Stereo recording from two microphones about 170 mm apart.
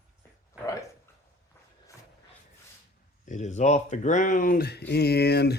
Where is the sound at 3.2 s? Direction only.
45° left (ahead or behind).